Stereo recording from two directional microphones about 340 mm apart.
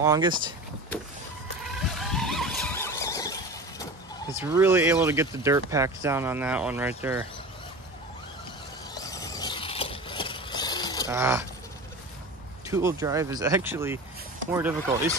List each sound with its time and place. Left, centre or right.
0.0 s speech: centre
1.8 s vehicle: centre
4.4 s speech: centre
9.0 s vehicle: centre
11.1 s speech: centre
12.6 s speech: centre